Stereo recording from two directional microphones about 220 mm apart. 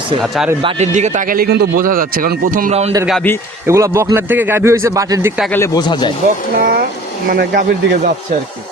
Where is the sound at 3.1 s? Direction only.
5° left (ahead or behind).